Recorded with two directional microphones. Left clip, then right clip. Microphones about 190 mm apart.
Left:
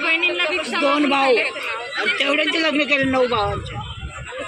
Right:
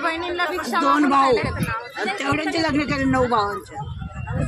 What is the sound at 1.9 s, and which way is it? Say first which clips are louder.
Speech: left 6 dB; 25° right (ahead or behind).